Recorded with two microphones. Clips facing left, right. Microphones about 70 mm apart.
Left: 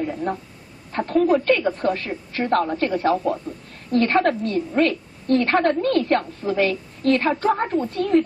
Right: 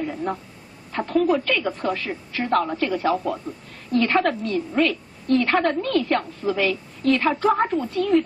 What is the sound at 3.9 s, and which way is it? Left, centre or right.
A woman's voice, left.